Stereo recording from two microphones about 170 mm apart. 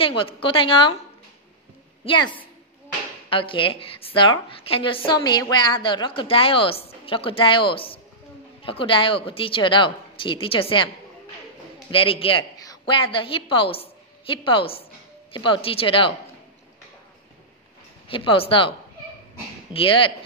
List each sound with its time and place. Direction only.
0.0 s a woman's voice: 30° left (ahead or behind)
3.3 s a woman's voice: 30° left (ahead or behind)
11.9 s a woman's voice: 30° left (ahead or behind)
18.0 s a woman's voice: 30° left (ahead or behind)
19.7 s a woman's voice: 30° left (ahead or behind)